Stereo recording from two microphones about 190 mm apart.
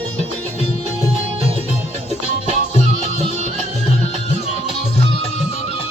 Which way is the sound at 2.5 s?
35° left (ahead or behind).